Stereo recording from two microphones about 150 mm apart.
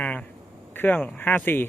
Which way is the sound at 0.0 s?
10° left (ahead or behind).